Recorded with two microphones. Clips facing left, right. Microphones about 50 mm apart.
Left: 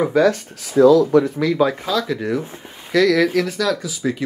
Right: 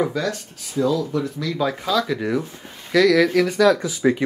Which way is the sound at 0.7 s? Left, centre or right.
Left.